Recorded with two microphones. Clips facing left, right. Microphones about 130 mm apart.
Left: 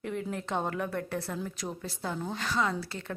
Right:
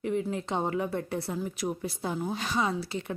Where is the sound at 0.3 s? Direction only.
15° right (ahead or behind).